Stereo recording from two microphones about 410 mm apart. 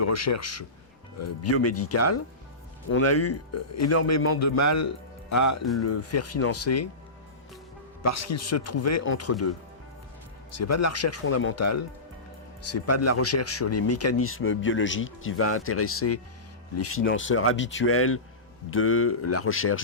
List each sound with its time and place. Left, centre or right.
0.0 s speech: left
8.0 s speech: left
10.5 s speech: left